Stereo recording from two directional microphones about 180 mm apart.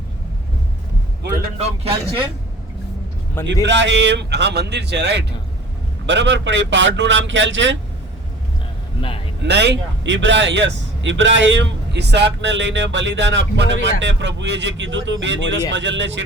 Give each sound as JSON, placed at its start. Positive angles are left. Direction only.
{"t": 1.5, "sound": "speech", "side_deg": -30}
{"t": 3.4, "sound": "speech", "side_deg": -90}
{"t": 9.0, "sound": "a sound", "side_deg": 30}
{"t": 9.5, "sound": "speech", "side_deg": -70}